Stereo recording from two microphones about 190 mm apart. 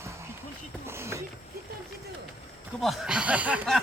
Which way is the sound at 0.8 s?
15° right (ahead or behind).